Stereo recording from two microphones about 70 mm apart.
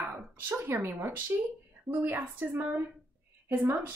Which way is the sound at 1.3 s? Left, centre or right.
Right.